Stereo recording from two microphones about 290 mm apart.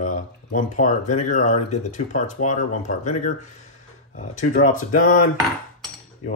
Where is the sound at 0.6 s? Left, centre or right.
Left.